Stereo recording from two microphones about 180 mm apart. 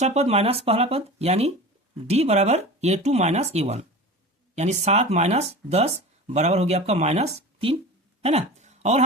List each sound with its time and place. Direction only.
0.0 s speech: 35° right (ahead or behind)